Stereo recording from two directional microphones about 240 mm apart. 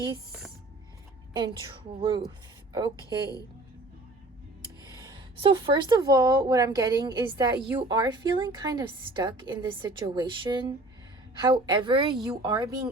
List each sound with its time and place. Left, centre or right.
1.3 s a woman's voice: centre
5.0 s a woman's voice: centre